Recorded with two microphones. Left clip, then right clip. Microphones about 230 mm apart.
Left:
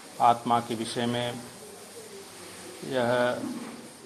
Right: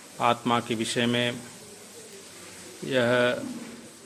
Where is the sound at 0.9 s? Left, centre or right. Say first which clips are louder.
Right 4 dB; right.